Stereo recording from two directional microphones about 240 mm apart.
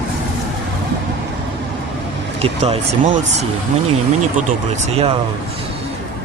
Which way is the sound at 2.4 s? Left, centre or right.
Right.